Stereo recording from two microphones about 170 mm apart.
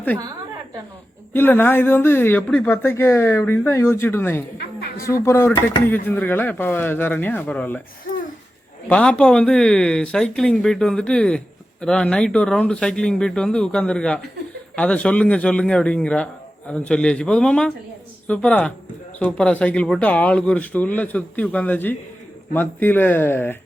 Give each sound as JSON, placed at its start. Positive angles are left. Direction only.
{"t": 1.3, "sound": "a woman's voice", "side_deg": 10}
{"t": 8.9, "sound": "a woman's voice", "side_deg": 5}